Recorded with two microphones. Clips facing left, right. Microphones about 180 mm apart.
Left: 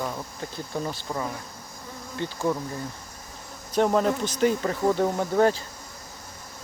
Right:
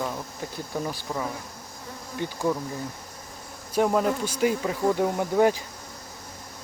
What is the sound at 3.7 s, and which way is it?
Speech, 5° right (ahead or behind).